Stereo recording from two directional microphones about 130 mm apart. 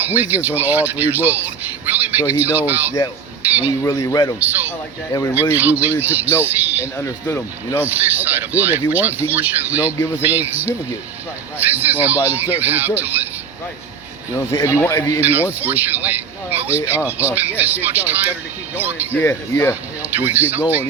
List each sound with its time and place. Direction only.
0.0 s speech: 15° right (ahead or behind)
3.7 s speech: 30° left (ahead or behind)
4.4 s speech: 15° right (ahead or behind)
7.0 s speech: 20° left (ahead or behind)
7.9 s speech: 15° right (ahead or behind)
14.6 s speech: 25° left (ahead or behind)
15.2 s speech: 15° right (ahead or behind)
19.1 s speech: 15° left (ahead or behind)
20.1 s speech: 15° right (ahead or behind)